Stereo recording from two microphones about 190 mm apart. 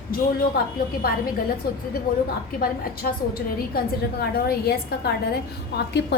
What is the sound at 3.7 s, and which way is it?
A woman's voice, 55° left (ahead or behind).